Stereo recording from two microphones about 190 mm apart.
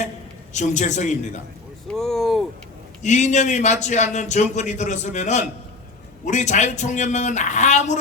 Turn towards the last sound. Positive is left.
turn(degrees=40)  # may be behind; listen again after turning